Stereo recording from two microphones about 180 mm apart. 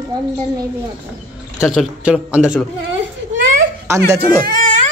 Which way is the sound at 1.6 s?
5° right (ahead or behind).